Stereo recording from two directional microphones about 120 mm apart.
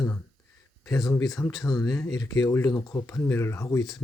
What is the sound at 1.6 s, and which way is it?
Speech, 30° left (ahead or behind).